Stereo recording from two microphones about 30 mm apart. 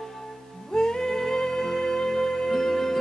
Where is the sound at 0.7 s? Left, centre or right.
Left.